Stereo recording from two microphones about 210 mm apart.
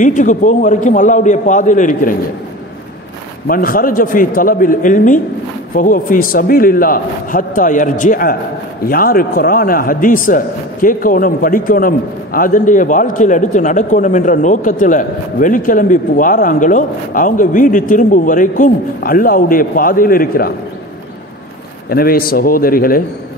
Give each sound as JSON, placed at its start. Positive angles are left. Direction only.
{"t": 0.0, "sound": "a man's voice", "side_deg": 35}
{"t": 3.4, "sound": "a man's voice", "side_deg": 45}
{"t": 21.8, "sound": "a man's voice", "side_deg": 45}